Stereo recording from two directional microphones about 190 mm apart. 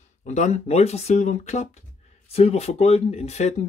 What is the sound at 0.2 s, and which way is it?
Speech, 40° left (ahead or behind).